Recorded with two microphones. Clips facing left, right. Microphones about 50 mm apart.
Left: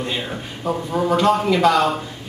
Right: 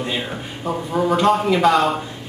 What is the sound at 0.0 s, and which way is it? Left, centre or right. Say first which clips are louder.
Speech: right 1 dB; centre.